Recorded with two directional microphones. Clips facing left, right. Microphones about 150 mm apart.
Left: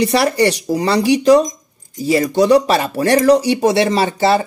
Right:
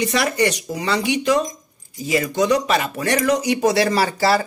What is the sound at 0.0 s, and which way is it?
Speech, 35° left (ahead or behind).